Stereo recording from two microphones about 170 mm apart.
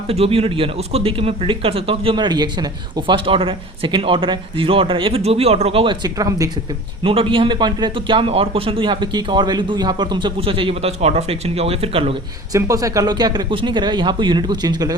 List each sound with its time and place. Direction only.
0.1 s speech: 35° right (ahead or behind)
7.0 s speech: 30° right (ahead or behind)
12.5 s speech: 20° right (ahead or behind)